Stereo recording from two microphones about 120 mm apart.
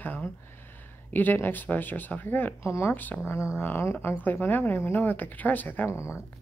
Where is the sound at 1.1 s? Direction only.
15° left (ahead or behind).